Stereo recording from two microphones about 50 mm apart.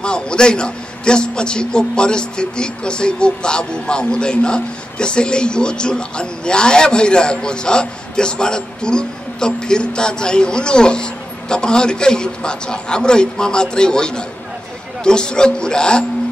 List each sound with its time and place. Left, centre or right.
0.0 s a man's voice: centre